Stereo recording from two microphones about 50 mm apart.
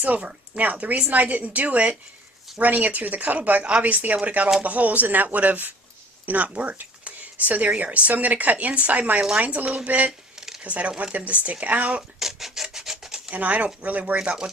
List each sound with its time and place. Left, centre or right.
0.0 s speech: right
10.1 s a sound: centre
10.6 s speech: right
12.2 s rub: centre
13.3 s speech: right